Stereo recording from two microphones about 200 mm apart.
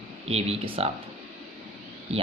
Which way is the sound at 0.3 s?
30° right (ahead or behind).